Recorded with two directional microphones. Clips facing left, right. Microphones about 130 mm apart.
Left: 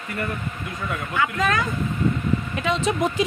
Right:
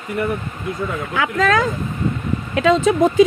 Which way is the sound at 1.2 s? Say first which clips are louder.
Right 5 dB; 90° right.